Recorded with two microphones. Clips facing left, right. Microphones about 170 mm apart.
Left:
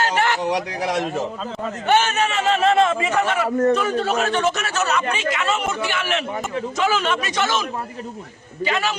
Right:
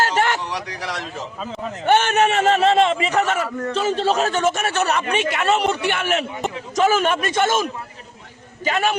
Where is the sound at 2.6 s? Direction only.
30° right (ahead or behind).